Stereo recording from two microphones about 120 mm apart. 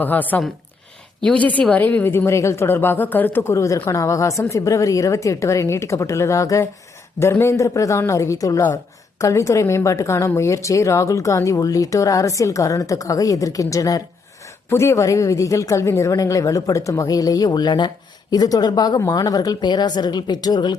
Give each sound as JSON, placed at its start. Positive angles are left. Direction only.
{"t": 0.0, "sound": "a woman's voice", "side_deg": 15}